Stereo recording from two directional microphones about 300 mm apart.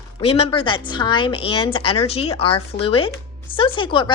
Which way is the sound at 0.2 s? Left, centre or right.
Centre.